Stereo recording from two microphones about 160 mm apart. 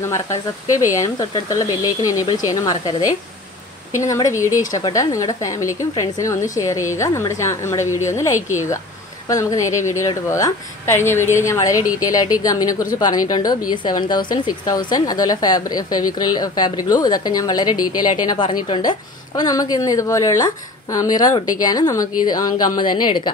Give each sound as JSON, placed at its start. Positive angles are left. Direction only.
{"t": 0.0, "sound": "a woman's voice", "side_deg": 20}
{"t": 3.9, "sound": "a woman's voice", "side_deg": 20}
{"t": 9.6, "sound": "speech", "side_deg": 50}
{"t": 9.8, "sound": "a woman's voice", "side_deg": 20}